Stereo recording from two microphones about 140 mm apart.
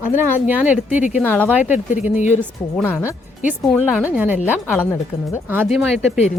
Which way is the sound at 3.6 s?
Centre (ahead or behind).